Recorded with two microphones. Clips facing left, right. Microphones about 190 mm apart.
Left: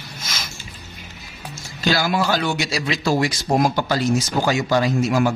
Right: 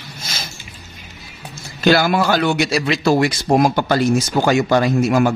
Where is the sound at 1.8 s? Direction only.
60° right (ahead or behind).